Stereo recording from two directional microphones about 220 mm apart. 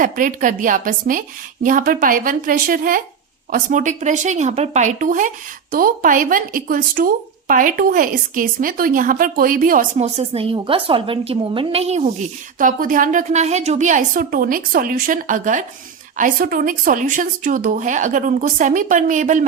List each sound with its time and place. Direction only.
0.0 s a woman's voice: 35° right (ahead or behind)